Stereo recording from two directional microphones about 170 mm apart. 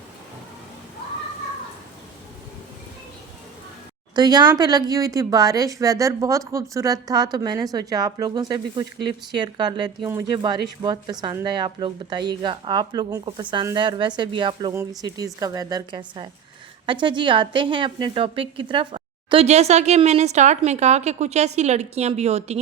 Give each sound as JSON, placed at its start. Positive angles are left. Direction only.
{"t": 4.1, "sound": "speech", "side_deg": -25}